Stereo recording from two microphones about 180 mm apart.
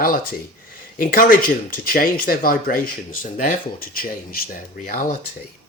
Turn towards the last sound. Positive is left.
turn(degrees=50)  # may be behind; listen again after turning